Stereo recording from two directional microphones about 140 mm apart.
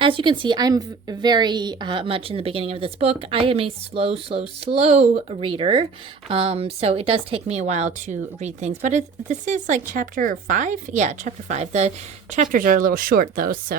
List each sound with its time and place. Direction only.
0.0 s a woman's voice: 35° right (ahead or behind); by 11.9 s 55° right (ahead or behind)
12.4 s speech: 75° right (ahead or behind)